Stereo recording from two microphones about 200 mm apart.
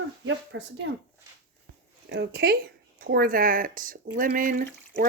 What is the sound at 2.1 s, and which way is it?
Speech, 55° right (ahead or behind).